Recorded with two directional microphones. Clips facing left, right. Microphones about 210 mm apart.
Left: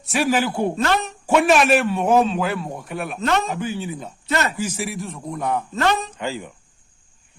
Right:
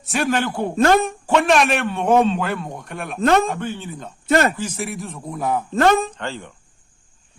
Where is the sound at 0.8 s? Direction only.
50° right (ahead or behind).